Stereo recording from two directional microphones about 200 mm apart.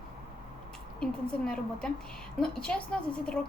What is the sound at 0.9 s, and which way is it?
A woman's voice, 5° left (ahead or behind).